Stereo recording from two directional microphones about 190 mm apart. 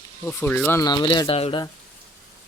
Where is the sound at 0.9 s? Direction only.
25° left (ahead or behind).